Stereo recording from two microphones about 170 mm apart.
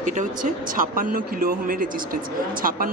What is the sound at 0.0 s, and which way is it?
Speech, 50° right (ahead or behind).